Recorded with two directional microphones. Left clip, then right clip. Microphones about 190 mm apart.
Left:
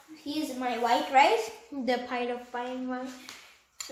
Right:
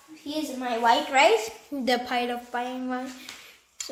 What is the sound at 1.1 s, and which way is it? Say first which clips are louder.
Speech: right 1 dB; 40° right (ahead or behind).